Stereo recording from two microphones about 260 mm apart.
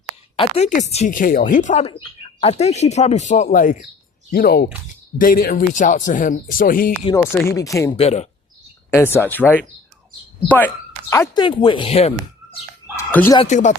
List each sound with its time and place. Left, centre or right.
0.3 s speech: left
7.1 s speech: centre
8.0 s speech: left
8.9 s speech: centre
11.1 s speech: centre
13.0 s fowl: centre
13.4 s speech: left